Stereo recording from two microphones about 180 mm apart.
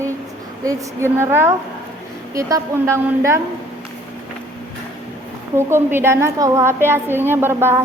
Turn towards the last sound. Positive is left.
turn(degrees=-15)  # may be behind; listen again after turning